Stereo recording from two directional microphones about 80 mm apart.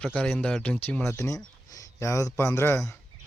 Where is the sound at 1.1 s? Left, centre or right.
Left.